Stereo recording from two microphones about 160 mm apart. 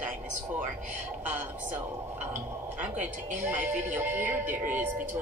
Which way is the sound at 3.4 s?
10° right (ahead or behind).